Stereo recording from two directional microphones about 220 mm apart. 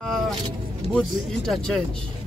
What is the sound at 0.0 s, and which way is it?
Vehicle, centre (ahead or behind).